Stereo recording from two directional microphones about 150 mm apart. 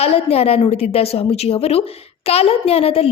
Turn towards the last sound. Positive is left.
turn(degrees=40)  # may be behind; listen again after turning